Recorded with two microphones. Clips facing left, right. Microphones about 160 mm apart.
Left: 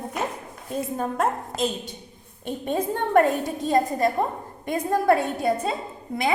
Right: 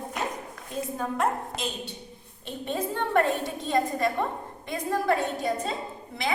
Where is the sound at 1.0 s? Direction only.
45° left (ahead or behind).